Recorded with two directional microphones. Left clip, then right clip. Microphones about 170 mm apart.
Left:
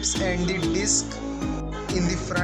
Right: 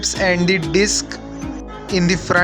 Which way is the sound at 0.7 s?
40° right (ahead or behind).